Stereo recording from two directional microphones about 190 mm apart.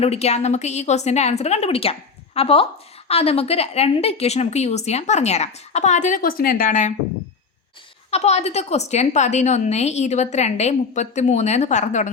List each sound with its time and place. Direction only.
0.0 s a woman's voice: 35° left (ahead or behind)
8.1 s a woman's voice: 35° left (ahead or behind)